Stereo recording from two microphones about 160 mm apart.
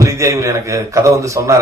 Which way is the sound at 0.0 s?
20° right (ahead or behind).